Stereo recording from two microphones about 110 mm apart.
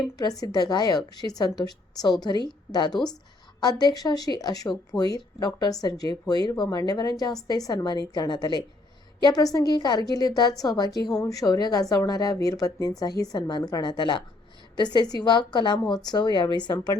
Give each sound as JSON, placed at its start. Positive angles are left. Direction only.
{"t": 0.2, "sound": "a woman's voice", "side_deg": 35}
{"t": 2.9, "sound": "a woman's voice", "side_deg": 5}
{"t": 3.6, "sound": "a woman's voice", "side_deg": 40}